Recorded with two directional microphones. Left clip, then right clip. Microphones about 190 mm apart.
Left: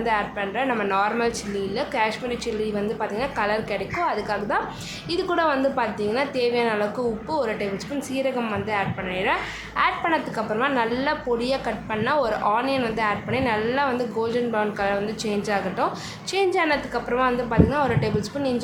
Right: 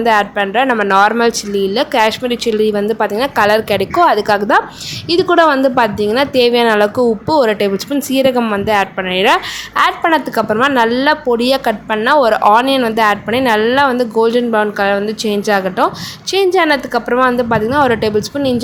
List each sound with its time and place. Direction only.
0.0 s a woman's voice: 45° right (ahead or behind)